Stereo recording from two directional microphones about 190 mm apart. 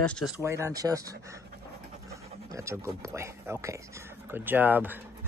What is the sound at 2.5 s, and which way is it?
Speech, 15° right (ahead or behind).